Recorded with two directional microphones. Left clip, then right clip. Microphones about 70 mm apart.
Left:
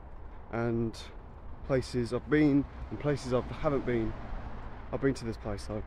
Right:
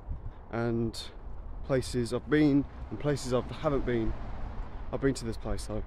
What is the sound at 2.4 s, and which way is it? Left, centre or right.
Speech, centre.